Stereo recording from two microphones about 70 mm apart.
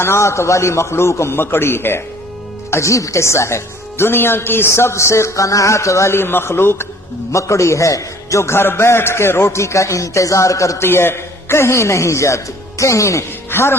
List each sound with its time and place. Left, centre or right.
0.0 s speech: left
7.3 s a man's voice: left
10.8 s a man's voice: left